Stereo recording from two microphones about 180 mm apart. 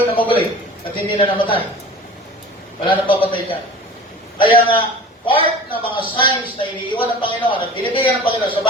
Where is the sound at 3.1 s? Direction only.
30° left (ahead or behind).